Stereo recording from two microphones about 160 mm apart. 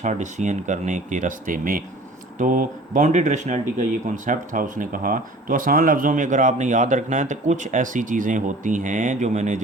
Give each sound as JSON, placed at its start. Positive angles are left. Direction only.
{"t": 0.0, "sound": "speech", "side_deg": -50}